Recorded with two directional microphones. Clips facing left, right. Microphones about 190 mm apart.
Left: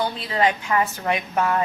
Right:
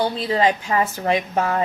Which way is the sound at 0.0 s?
30° right (ahead or behind).